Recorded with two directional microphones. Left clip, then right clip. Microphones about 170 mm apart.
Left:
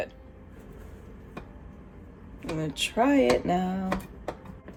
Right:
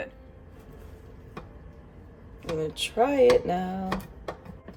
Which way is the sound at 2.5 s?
40° left (ahead or behind).